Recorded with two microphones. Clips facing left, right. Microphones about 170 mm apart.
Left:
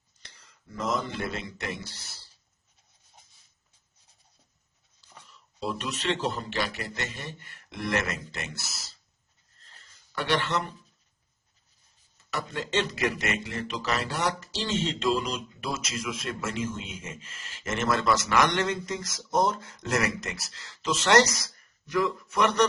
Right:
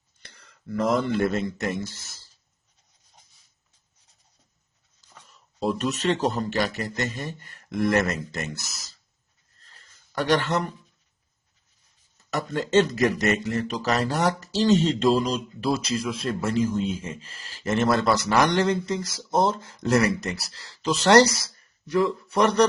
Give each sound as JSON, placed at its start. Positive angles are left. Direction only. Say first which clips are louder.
{"t": 0.2, "sound": "speech", "louder": "right 4 dB", "side_deg": -60}
{"t": 5.3, "sound": "speech", "louder": "right 7 dB", "side_deg": -45}
{"t": 9.7, "sound": "a sound", "louder": "right 6 dB", "side_deg": -40}
{"t": 12.1, "sound": "speech", "louder": "right 6 dB", "side_deg": -45}